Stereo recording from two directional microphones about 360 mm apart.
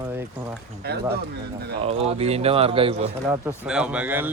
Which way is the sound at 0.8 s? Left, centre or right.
Right.